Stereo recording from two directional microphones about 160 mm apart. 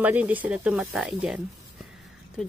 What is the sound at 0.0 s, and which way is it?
Speech, 10° right (ahead or behind).